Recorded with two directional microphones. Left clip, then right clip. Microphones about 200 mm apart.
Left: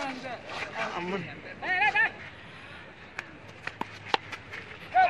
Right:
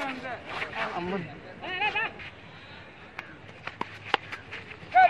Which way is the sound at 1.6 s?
25° left (ahead or behind).